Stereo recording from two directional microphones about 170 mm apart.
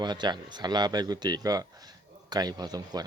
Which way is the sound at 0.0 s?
25° right (ahead or behind).